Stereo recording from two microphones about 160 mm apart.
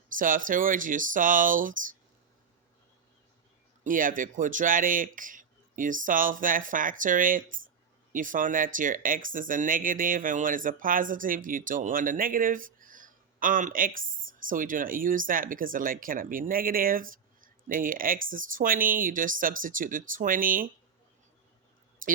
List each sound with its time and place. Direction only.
0.2 s speech: 55° right (ahead or behind)
3.8 s speech: 60° right (ahead or behind)
22.0 s speech: 60° right (ahead or behind)